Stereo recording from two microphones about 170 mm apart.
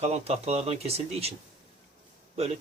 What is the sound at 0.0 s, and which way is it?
Speech, 40° right (ahead or behind).